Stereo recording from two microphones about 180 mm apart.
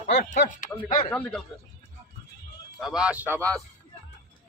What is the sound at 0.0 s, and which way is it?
Speech, 70° left (ahead or behind).